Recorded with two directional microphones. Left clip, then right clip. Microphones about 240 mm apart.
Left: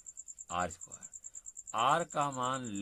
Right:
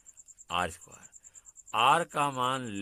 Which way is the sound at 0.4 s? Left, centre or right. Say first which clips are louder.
Right 4 dB; right.